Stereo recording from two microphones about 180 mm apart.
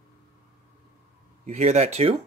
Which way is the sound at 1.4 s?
40° right (ahead or behind).